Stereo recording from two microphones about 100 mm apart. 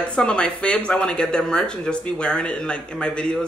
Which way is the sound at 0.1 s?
10° left (ahead or behind).